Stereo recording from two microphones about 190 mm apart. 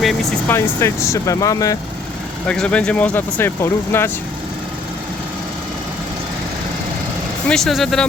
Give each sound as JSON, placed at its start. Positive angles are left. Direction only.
{"t": 0.0, "sound": "speech", "side_deg": 0}
{"t": 0.4, "sound": "speech", "side_deg": 15}
{"t": 2.5, "sound": "speech", "side_deg": 5}
{"t": 7.4, "sound": "speech", "side_deg": 0}